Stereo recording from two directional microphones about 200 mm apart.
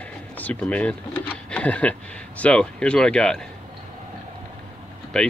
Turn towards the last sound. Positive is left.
turn(degrees=5)  # may be behind; listen again after turning